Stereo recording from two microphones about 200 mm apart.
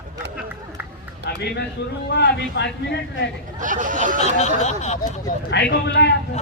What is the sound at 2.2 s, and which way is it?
A man's voice, 60° left (ahead or behind).